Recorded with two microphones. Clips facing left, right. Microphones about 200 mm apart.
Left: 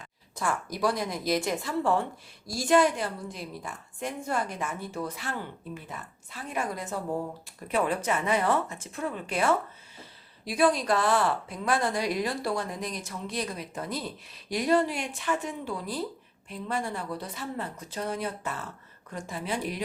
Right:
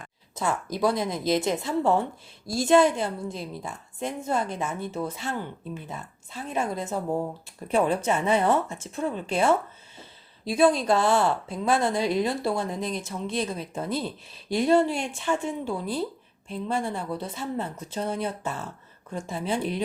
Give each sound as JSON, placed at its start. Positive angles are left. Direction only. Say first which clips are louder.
{"t": 0.3, "sound": "speech", "louder": "right 3 dB", "side_deg": -25}